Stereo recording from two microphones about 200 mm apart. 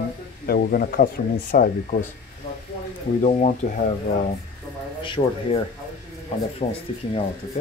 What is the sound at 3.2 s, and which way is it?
Speech, 35° left (ahead or behind).